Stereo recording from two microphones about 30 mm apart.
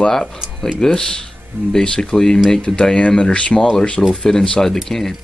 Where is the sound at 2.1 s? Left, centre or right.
Centre.